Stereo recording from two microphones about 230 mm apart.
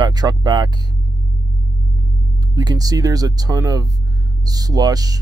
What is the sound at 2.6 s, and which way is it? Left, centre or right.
Speech, centre.